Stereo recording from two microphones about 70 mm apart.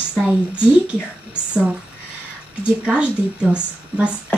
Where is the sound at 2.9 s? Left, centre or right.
Centre.